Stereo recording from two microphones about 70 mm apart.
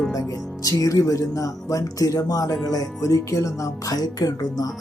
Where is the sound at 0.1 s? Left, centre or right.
Left.